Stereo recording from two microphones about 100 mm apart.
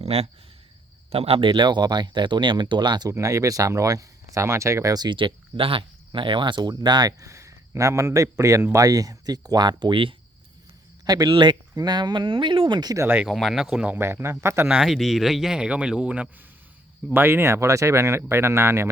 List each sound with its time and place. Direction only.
0.0 s speech: 90° right
1.1 s speech: 75° right (ahead or behind); by 3.1 s 50° right (ahead or behind)
3.1 s speech: 35° right (ahead or behind)
5.0 s speech: 55° right (ahead or behind)
7.2 s speech: 30° right (ahead or behind); by 10.2 s 60° right (ahead or behind)
11.0 s speech: 40° right (ahead or behind)
11.3 s speech: 50° right (ahead or behind)
13.0 s speech: 20° right (ahead or behind)
13.2 s speech: centre (ahead or behind)
13.9 s speech: 25° right (ahead or behind)
14.7 s speech: 5° right (ahead or behind)
17.1 s speech: 20° right (ahead or behind)